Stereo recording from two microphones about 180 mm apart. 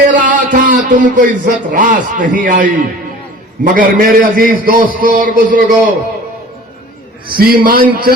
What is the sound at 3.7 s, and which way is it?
A man's voice, 50° right (ahead or behind).